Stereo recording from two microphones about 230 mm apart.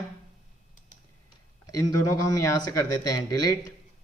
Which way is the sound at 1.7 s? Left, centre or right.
Centre.